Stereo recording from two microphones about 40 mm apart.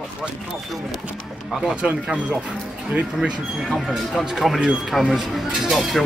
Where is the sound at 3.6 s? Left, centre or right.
Centre.